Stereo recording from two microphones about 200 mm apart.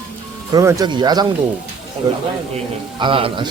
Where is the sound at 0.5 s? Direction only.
20° right (ahead or behind).